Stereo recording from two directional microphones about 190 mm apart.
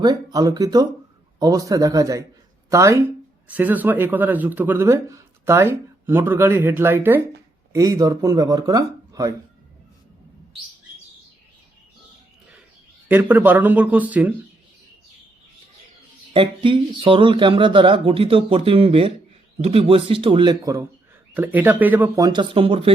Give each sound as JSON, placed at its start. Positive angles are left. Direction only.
{"t": 0.0, "sound": "speech", "side_deg": -20}
{"t": 13.1, "sound": "speech", "side_deg": -10}
{"t": 16.3, "sound": "speech", "side_deg": -25}
{"t": 21.3, "sound": "speech", "side_deg": -10}